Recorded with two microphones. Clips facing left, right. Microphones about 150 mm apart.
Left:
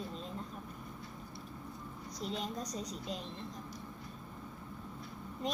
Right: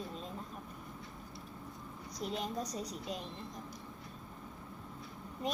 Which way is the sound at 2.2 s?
55° right (ahead or behind).